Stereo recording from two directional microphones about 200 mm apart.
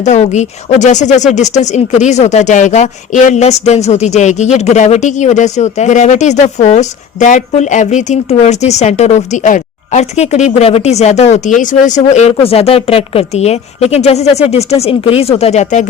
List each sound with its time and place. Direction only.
0.0 s speech: 35° left (ahead or behind)